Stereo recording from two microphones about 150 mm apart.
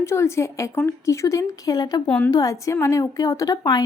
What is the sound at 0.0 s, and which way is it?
Speech, 15° left (ahead or behind).